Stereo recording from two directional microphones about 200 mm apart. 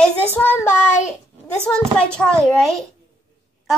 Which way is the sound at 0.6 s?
35° left (ahead or behind).